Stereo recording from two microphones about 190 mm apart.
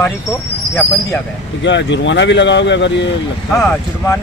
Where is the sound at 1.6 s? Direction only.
70° left (ahead or behind).